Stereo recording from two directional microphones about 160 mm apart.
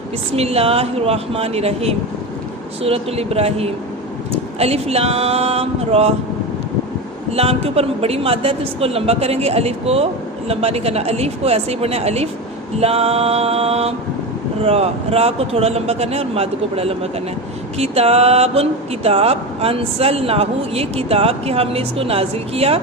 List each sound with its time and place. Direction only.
0.3 s speech: 40° right (ahead or behind)
7.3 s speech: 40° right (ahead or behind)